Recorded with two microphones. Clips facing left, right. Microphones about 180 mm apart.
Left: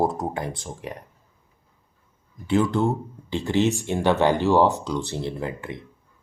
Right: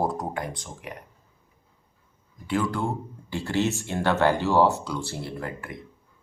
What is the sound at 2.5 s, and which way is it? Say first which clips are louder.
Speech: left 5 dB; 25° left (ahead or behind).